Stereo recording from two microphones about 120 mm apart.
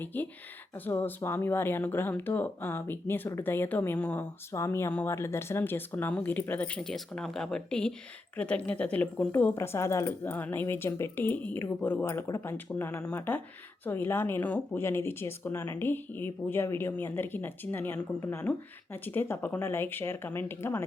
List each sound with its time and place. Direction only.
0.0 s speech: 15° left (ahead or behind)
4.5 s speech: 25° left (ahead or behind)
4.9 s speech: 10° left (ahead or behind)